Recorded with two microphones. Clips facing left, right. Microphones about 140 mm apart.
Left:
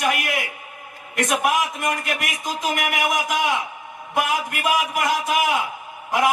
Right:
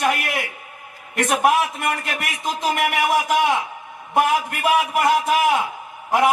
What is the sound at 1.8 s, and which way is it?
A man's voice, 30° right (ahead or behind).